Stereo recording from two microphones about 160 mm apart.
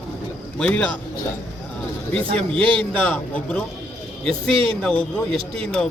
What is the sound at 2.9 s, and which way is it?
Speech, 10° left (ahead or behind).